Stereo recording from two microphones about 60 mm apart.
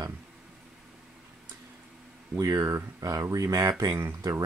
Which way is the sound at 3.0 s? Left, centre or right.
Right.